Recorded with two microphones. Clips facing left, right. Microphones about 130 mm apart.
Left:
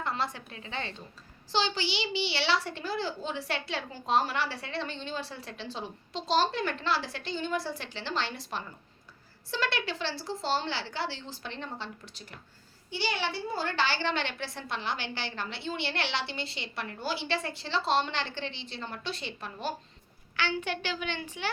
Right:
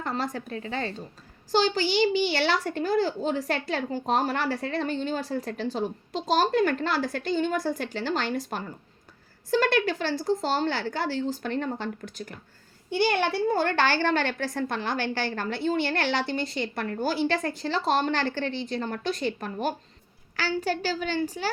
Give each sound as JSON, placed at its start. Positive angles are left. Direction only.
{"t": 0.0, "sound": "a woman's voice", "side_deg": -45}
{"t": 20.3, "sound": "a woman's voice", "side_deg": -40}